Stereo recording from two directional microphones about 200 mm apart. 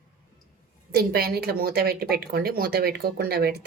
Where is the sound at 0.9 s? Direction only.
50° right (ahead or behind).